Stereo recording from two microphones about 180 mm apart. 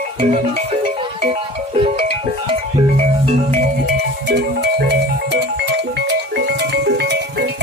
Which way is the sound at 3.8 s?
70° right (ahead or behind).